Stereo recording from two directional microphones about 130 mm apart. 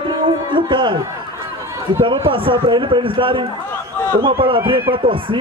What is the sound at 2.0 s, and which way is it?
A man's voice, 40° right (ahead or behind).